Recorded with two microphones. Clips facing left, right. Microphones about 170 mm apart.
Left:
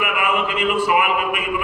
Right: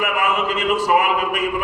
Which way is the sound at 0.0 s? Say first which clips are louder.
Right 1 dB; 40° right (ahead or behind).